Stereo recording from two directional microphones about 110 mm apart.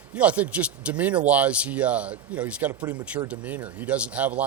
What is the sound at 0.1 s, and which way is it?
A man's voice, 10° right (ahead or behind).